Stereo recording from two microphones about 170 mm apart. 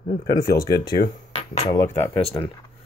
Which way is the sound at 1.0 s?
35° left (ahead or behind).